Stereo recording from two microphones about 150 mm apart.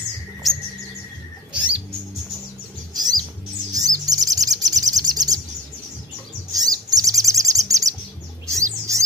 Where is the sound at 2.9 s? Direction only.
25° right (ahead or behind).